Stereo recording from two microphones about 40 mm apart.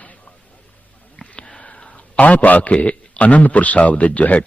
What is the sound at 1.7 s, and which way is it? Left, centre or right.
A man's voice, left.